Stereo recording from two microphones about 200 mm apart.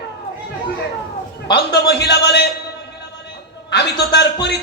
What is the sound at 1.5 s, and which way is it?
Speech, 55° left (ahead or behind).